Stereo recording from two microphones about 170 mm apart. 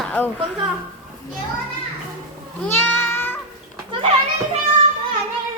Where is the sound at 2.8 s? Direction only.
10° left (ahead or behind).